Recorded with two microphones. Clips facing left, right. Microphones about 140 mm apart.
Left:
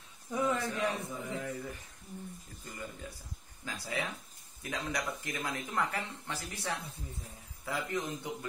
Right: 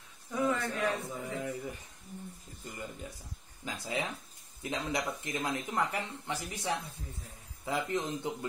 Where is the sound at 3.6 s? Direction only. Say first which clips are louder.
Right 2 dB; 20° right (ahead or behind).